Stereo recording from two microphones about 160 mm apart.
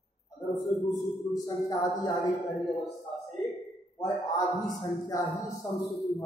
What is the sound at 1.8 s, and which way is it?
Speech, 20° left (ahead or behind).